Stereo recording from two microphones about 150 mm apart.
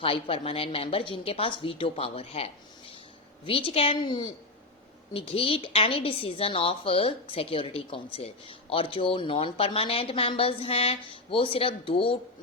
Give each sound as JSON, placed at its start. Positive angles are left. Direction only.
{"t": 0.0, "sound": "a woman's voice", "side_deg": 40}